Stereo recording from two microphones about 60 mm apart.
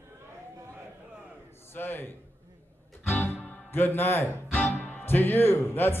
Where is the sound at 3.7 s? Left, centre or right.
Left.